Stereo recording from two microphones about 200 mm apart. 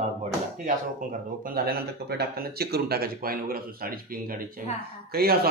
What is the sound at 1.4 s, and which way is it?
Speech, 50° right (ahead or behind).